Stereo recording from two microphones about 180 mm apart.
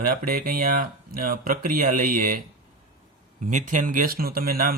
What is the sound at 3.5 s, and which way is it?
Speech, 45° right (ahead or behind).